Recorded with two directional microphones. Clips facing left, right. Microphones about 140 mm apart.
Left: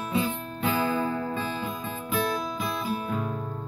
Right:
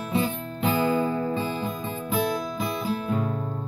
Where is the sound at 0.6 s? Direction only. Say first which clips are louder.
Right 3 dB; 25° right (ahead or behind).